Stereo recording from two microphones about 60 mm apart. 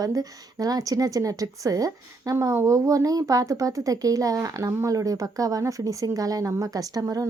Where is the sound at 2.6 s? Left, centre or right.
Right.